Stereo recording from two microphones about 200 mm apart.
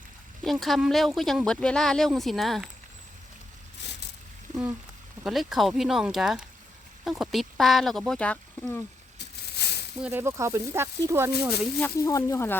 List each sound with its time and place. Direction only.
0.4 s speech: centre (ahead or behind)
5.2 s speech: centre (ahead or behind)
9.6 s a sound: 55° left (ahead or behind)
10.0 s speech: 10° right (ahead or behind)
11.4 s speech: centre (ahead or behind)
11.9 s speech: 15° left (ahead or behind)